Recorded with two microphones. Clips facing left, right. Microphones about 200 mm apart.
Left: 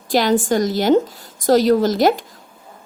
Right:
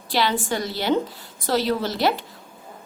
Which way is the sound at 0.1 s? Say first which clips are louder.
Left 7 dB; 45° left (ahead or behind).